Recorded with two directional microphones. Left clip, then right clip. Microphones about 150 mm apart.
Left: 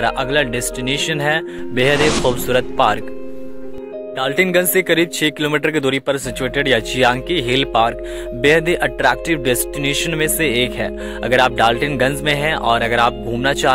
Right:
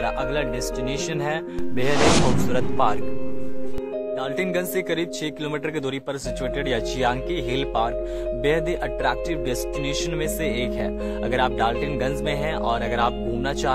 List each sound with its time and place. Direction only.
0.0 s speech: 30° left (ahead or behind)
2.0 s speech: centre (ahead or behind)
2.5 s speech: 30° left (ahead or behind)
4.2 s speech: 35° left (ahead or behind)